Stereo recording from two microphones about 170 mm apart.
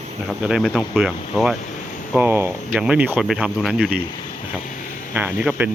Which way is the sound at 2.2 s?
15° right (ahead or behind).